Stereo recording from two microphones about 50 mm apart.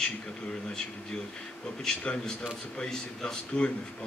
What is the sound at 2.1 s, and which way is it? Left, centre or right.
A man's voice, centre.